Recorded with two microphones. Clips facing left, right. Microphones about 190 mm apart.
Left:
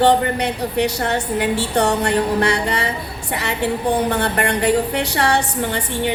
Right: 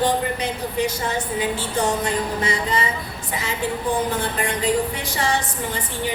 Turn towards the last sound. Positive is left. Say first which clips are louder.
# left 6 dB
turn(degrees=70)  # may be behind; listen again after turning